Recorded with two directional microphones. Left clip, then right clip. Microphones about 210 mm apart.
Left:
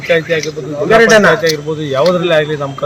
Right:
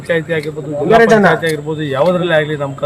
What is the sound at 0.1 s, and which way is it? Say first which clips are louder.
A man's voice: left 3 dB; 35° right (ahead or behind).